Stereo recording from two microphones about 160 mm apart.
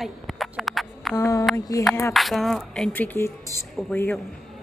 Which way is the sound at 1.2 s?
20° left (ahead or behind).